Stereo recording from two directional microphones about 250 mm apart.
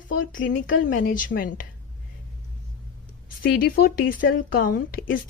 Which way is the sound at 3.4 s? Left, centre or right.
Left.